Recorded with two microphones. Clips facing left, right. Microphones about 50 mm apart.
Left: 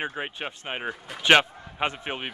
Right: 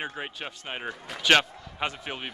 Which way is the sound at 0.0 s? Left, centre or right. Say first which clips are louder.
Left 3 dB; centre.